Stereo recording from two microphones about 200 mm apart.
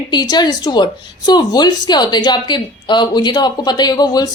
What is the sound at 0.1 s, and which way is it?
A woman's voice, 20° left (ahead or behind).